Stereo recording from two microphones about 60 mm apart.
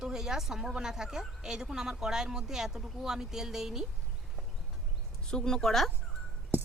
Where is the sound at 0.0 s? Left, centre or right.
Centre.